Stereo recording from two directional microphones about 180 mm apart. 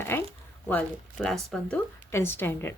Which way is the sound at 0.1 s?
15° left (ahead or behind).